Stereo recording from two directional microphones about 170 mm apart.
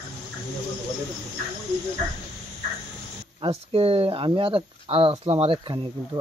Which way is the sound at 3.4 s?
35° right (ahead or behind).